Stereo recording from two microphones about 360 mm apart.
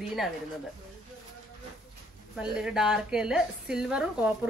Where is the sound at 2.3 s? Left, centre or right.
Centre.